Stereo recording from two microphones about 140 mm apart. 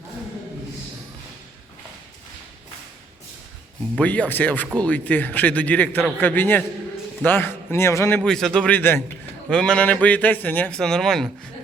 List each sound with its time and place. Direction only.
3.9 s speech: 10° left (ahead or behind)
8.2 s speech: 5° left (ahead or behind)